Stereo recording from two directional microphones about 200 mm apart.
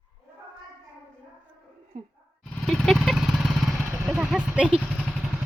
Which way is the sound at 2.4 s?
5° left (ahead or behind).